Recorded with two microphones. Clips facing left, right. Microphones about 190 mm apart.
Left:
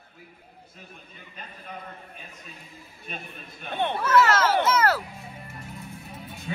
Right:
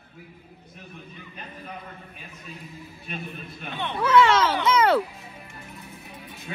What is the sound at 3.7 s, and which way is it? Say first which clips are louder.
Speech: left 4 dB; 55° left (ahead or behind).